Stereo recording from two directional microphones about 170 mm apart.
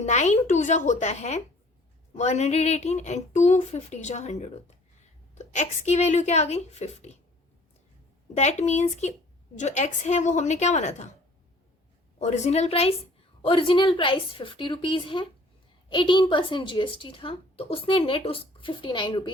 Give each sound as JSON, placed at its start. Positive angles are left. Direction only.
{"t": 0.0, "sound": "a woman's voice", "side_deg": 40}
{"t": 8.3, "sound": "a woman's voice", "side_deg": 40}
{"t": 12.2, "sound": "a woman's voice", "side_deg": 45}